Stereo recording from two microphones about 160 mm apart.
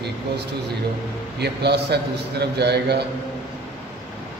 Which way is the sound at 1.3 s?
90° right.